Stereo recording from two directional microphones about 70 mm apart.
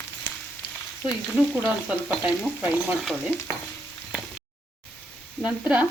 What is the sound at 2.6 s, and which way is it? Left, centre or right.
Speech, centre.